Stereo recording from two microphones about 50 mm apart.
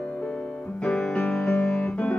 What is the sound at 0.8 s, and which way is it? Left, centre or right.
Music, centre.